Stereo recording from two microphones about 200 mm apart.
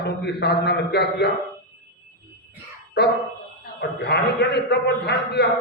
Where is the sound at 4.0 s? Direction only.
55° left (ahead or behind).